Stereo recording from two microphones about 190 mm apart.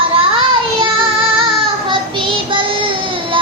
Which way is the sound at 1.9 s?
25° right (ahead or behind).